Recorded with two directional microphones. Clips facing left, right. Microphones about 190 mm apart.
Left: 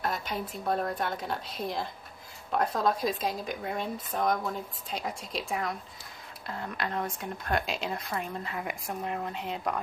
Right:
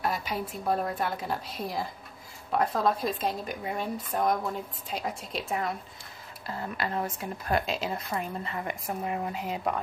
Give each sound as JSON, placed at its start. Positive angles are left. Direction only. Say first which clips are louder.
{"t": 0.0, "sound": "speech", "louder": "right 2 dB", "side_deg": -5}